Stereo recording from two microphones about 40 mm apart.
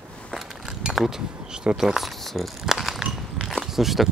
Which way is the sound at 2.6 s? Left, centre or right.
Centre.